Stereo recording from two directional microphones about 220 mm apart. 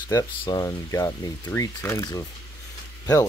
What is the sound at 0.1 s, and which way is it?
Speech, 20° left (ahead or behind).